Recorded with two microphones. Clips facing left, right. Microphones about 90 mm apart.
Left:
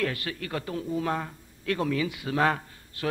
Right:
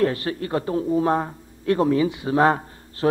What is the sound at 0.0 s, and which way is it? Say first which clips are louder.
A man's voice: right 8 dB; 30° right (ahead or behind).